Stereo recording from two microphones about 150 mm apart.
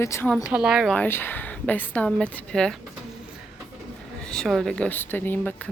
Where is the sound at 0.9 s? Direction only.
15° left (ahead or behind).